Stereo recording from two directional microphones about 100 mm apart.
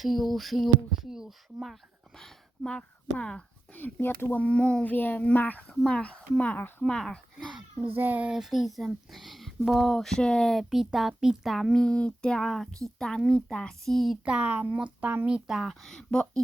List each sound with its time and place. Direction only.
0.0 s speech: centre (ahead or behind); by 6.8 s 20° left (ahead or behind)
6.8 s speech: 5° left (ahead or behind)
7.9 s speech: 20° right (ahead or behind)
8.3 s speech: 5° right (ahead or behind)
14.3 s speech: 10° right (ahead or behind)
15.4 s speech: centre (ahead or behind)